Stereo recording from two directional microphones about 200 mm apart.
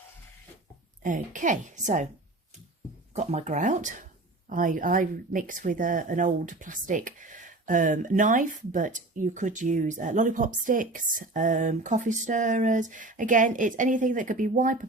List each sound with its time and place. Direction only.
1.0 s speech: 40° right (ahead or behind)
3.2 s speech: 35° right (ahead or behind)